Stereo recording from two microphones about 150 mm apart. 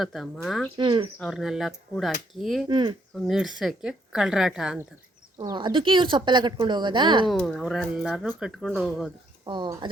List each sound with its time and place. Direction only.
0.0 s speech: centre (ahead or behind)
0.8 s a woman's voice: 35° right (ahead or behind)
1.2 s speech: centre (ahead or behind)
2.6 s a woman's voice: 30° right (ahead or behind)
3.2 s speech: 5° right (ahead or behind)
5.4 s a woman's voice: 30° right (ahead or behind)
7.3 s speech: centre (ahead or behind)
9.4 s a woman's voice: 30° right (ahead or behind)